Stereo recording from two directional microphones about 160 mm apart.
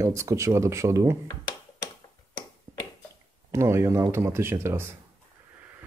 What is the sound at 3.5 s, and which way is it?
Speech, 15° right (ahead or behind).